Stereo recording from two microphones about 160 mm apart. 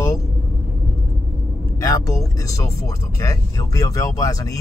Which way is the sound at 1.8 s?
20° left (ahead or behind).